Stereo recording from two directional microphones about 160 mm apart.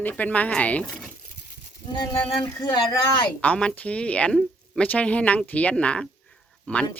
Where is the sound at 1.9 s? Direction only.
20° left (ahead or behind).